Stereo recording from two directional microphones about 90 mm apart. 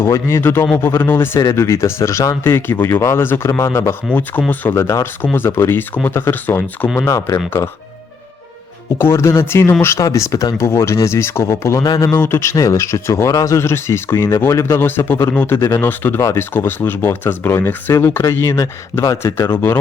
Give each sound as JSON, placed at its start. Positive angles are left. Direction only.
{"t": 0.0, "sound": "speech", "side_deg": 30}
{"t": 4.1, "sound": "speech", "side_deg": 20}
{"t": 7.0, "sound": "speech", "side_deg": 35}
{"t": 9.0, "sound": "speech", "side_deg": 30}
{"t": 11.8, "sound": "speech", "side_deg": 40}